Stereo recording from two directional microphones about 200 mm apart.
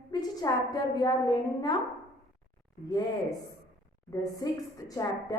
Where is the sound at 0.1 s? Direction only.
20° left (ahead or behind).